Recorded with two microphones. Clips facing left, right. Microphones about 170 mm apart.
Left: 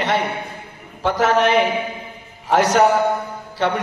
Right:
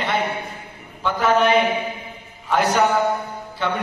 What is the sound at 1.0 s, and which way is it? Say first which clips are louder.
Speech: left 1 dB; 80° left.